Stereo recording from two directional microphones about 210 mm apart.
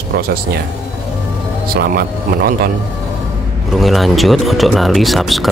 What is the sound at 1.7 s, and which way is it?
Speech, 45° right (ahead or behind).